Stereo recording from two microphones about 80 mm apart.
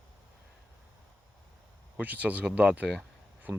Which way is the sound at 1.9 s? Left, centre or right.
Centre.